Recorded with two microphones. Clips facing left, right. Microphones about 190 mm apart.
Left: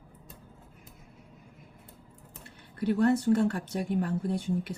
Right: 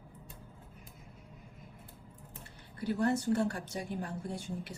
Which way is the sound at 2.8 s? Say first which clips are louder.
Left 6 dB; 65° left (ahead or behind).